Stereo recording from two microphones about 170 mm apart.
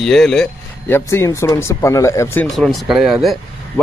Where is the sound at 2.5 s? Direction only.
Centre (ahead or behind).